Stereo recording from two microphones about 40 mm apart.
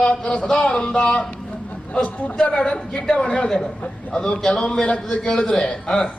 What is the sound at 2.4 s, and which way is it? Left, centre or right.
A man's voice, left.